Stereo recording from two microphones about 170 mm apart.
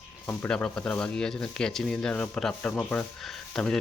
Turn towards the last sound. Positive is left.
turn(degrees=5)  # may be behind; listen again after turning